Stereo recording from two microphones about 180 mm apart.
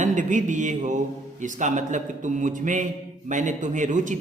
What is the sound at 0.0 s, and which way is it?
A man's voice, 45° right (ahead or behind).